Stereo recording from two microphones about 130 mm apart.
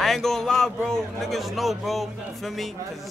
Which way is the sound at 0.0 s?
Centre (ahead or behind).